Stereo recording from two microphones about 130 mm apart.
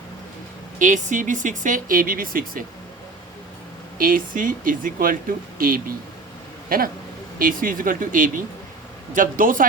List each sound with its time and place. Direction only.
0.8 s speech: 80° right
3.9 s speech: 90° right